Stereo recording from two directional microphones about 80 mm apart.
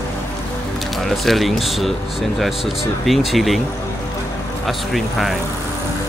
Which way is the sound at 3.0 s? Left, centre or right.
Centre.